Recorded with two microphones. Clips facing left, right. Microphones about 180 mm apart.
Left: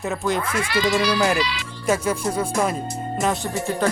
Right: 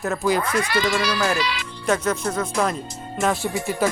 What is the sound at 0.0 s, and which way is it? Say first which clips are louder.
Speech: right 2 dB; centre (ahead or behind).